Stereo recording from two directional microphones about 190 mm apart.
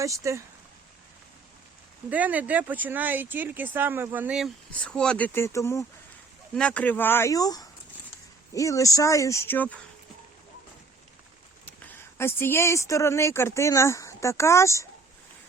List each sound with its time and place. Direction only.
0.0 s speech: 15° right (ahead or behind)
2.0 s speech: 10° right (ahead or behind); by 9.7 s 10° left (ahead or behind)
11.6 s speech: 10° left (ahead or behind)